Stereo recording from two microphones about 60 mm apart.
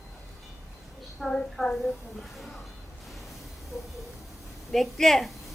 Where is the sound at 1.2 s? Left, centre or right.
Centre.